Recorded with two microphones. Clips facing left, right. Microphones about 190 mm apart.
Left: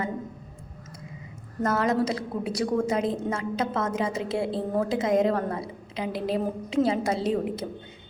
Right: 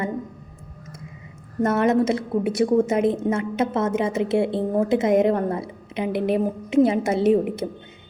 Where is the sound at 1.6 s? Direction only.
25° right (ahead or behind).